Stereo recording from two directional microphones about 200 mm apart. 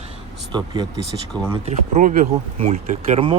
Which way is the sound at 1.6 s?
35° right (ahead or behind).